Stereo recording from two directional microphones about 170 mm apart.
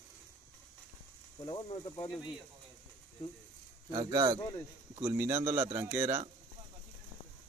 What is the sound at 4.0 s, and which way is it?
A man's voice, 25° right (ahead or behind).